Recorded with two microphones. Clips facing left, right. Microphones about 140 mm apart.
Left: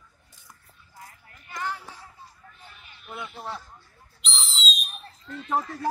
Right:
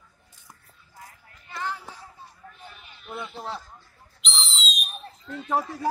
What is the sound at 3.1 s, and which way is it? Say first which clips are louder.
Speech: right 2 dB; centre (ahead or behind).